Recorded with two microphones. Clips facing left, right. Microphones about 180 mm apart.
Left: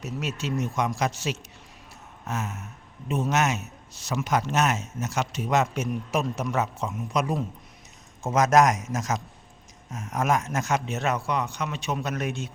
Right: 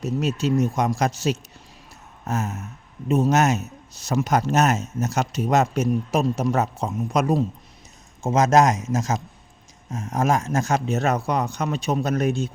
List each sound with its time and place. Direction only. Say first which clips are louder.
0.0 s a man's voice: right 8 dB; 35° right (ahead or behind)
8.2 s a man's voice: right 2 dB; 25° right (ahead or behind)